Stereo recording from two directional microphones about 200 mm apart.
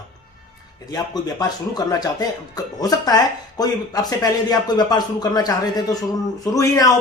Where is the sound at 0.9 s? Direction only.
20° left (ahead or behind).